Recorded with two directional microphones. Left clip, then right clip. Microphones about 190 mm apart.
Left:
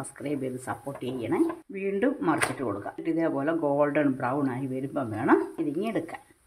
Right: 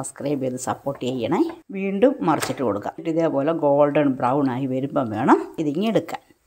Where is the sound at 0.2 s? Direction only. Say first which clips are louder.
Right 7 dB; 30° right (ahead or behind).